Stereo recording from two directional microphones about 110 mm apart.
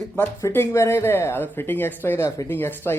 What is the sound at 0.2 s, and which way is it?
Speech, 20° left (ahead or behind).